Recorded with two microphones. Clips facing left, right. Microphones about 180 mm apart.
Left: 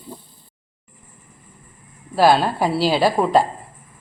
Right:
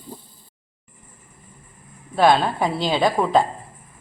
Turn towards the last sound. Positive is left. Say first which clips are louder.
# left 2 dB
turn(degrees=5)  # may be behind; listen again after turning